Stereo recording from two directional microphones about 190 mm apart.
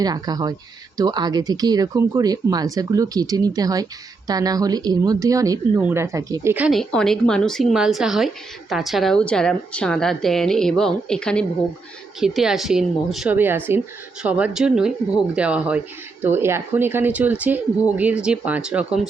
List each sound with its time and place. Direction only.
0.0 s a woman's voice: 20° right (ahead or behind)